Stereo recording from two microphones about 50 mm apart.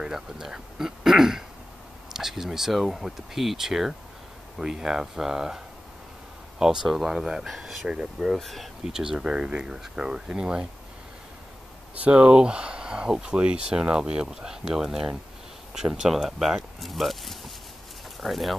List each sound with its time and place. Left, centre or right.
0.0 s throat clearing: centre
2.1 s speech: centre
6.6 s speech: centre
8.4 s speech: centre
8.8 s speech: centre
11.9 s speech: right; by 18.6 s centre